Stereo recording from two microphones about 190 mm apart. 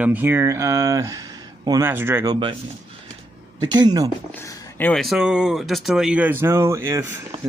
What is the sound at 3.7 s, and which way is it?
Speech, 20° right (ahead or behind).